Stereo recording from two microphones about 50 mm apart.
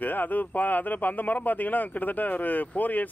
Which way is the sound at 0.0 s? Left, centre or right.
Left.